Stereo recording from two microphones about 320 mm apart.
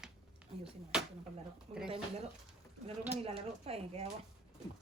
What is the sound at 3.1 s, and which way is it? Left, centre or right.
Speech, centre.